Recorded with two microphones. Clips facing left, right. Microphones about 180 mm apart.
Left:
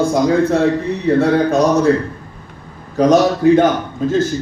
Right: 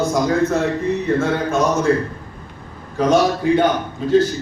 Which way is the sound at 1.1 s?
35° left (ahead or behind).